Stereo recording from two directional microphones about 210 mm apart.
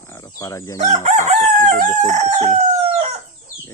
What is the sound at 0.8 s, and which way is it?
Chicken, 35° right (ahead or behind).